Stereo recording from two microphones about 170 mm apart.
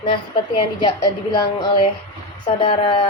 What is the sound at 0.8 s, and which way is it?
Speech, 25° left (ahead or behind).